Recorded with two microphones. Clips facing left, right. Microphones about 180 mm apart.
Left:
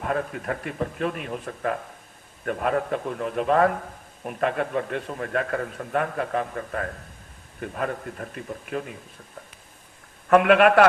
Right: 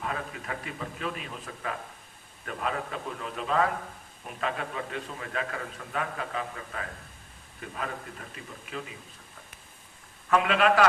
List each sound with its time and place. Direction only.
0.0 s a man's voice: 50° left (ahead or behind)
10.2 s a man's voice: 60° left (ahead or behind)